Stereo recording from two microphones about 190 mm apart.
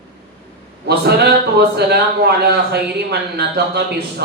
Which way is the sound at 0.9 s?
60° right (ahead or behind).